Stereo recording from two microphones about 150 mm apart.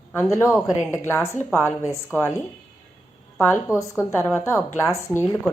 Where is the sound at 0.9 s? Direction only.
15° left (ahead or behind).